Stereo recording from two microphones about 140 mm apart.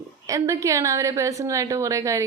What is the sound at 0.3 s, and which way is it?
A woman's voice, 25° right (ahead or behind).